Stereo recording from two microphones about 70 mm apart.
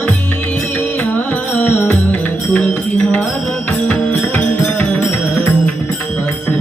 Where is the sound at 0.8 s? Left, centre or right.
Left.